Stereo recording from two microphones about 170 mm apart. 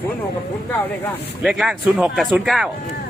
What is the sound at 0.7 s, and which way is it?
Speech, 10° left (ahead or behind).